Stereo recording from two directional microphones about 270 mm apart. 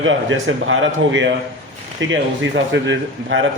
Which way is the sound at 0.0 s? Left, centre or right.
Right.